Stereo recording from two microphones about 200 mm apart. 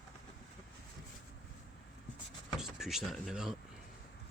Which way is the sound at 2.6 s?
Centre (ahead or behind).